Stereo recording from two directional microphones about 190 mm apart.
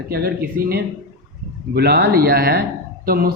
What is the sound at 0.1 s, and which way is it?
Speech, 55° right (ahead or behind).